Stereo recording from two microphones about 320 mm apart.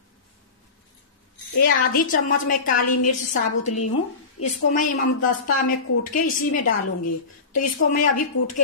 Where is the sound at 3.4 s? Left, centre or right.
Left.